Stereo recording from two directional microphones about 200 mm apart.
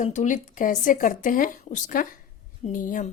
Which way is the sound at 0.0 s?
35° left (ahead or behind).